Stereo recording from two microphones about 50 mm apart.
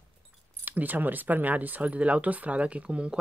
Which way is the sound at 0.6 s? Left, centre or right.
Right.